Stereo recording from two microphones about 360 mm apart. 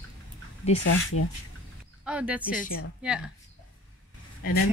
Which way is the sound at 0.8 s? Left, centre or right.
Left.